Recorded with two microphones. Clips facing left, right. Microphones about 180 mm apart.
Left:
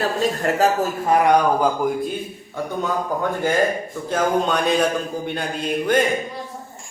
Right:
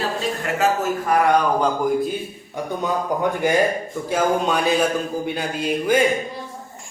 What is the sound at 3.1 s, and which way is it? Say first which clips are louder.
Speech: right 3 dB; 15° right (ahead or behind).